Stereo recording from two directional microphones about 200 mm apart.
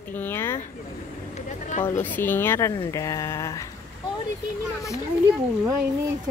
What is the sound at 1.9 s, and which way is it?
Speech, 10° left (ahead or behind).